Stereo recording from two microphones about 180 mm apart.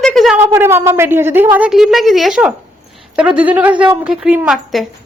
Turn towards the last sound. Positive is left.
turn(degrees=-5)  # may be behind; listen again after turning